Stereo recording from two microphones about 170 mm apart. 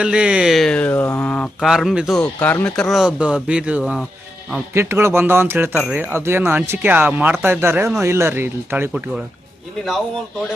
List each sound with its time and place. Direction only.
0.0 s speech: 5° right (ahead or behind)
1.7 s speech: 5° right (ahead or behind)
2.4 s speech: 10° left (ahead or behind); by 8.9 s 15° right (ahead or behind)
8.9 s speech: 5° right (ahead or behind)